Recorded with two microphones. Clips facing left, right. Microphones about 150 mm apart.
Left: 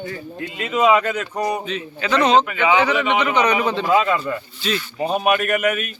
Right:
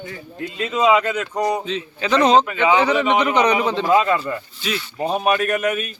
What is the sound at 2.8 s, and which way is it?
Speech, 35° right (ahead or behind).